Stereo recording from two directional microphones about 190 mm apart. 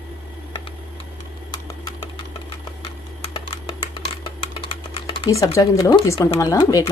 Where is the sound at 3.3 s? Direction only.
25° left (ahead or behind).